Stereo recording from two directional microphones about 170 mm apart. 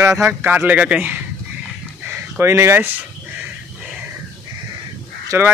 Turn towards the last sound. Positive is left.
turn(degrees=-15)  # may be behind; listen again after turning